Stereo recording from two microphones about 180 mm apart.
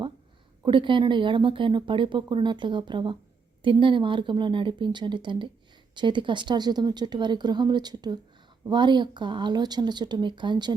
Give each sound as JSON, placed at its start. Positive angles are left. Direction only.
{"t": 0.6, "sound": "speech", "side_deg": -25}